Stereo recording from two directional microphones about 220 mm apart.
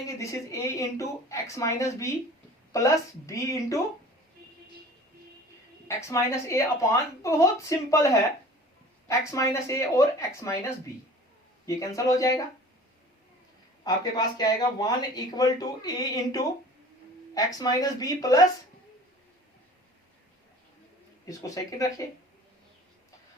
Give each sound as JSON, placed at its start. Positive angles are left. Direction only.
{"t": 0.0, "sound": "speech", "side_deg": 15}
{"t": 6.0, "sound": "speech", "side_deg": 15}
{"t": 13.8, "sound": "speech", "side_deg": 20}
{"t": 21.2, "sound": "speech", "side_deg": 15}